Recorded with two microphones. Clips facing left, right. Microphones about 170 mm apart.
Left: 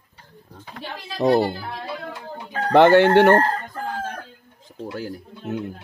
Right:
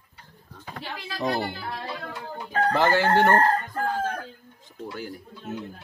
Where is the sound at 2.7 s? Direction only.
65° left (ahead or behind).